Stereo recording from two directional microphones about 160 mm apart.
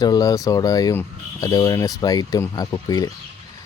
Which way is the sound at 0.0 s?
25° left (ahead or behind).